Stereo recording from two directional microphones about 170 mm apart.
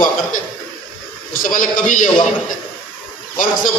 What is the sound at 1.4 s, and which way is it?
Speech, 50° left (ahead or behind).